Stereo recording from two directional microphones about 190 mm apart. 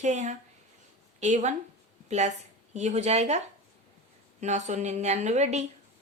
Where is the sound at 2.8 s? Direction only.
35° right (ahead or behind).